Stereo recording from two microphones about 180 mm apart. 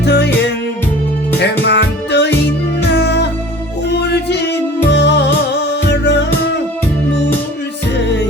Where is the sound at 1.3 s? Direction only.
70° left (ahead or behind).